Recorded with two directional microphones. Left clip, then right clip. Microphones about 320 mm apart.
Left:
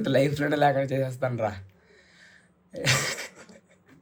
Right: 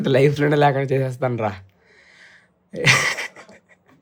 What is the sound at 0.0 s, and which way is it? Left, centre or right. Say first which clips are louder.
A man's voice: right 7 dB; right.